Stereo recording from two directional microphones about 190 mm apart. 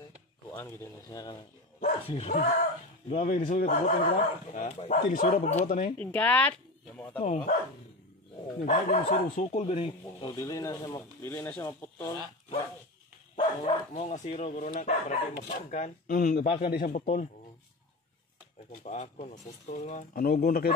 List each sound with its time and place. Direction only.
0.5 s speech: 15° left (ahead or behind)
2.0 s speech: 30° left (ahead or behind)
5.9 s speech: 5° left (ahead or behind)
7.2 s speech: 40° left (ahead or behind)
8.6 s speech: 40° left (ahead or behind)
10.3 s speech: 15° left (ahead or behind)
13.4 s speech: 35° left (ahead or behind)
18.8 s speech: 40° left (ahead or behind)